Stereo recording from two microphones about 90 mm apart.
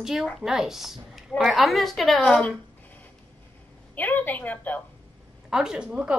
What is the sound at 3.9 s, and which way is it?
Speech, 20° left (ahead or behind).